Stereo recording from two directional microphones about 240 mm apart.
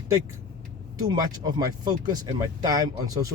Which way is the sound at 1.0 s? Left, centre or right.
Centre.